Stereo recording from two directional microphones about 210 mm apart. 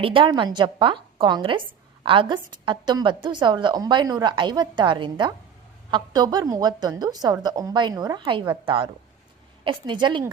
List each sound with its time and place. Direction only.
0.0 s a woman's voice: 25° right (ahead or behind)